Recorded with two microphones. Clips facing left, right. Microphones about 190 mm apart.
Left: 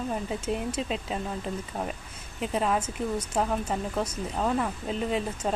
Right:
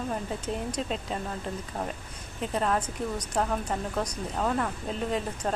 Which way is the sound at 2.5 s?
5° left (ahead or behind).